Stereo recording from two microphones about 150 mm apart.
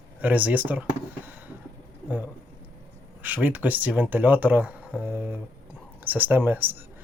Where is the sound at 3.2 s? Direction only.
10° right (ahead or behind).